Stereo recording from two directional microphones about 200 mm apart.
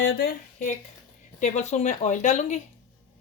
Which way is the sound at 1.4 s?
35° left (ahead or behind).